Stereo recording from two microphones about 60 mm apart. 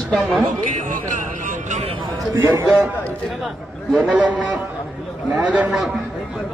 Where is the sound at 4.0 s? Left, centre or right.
Right.